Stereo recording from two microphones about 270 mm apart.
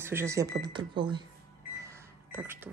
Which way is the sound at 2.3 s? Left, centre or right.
Centre.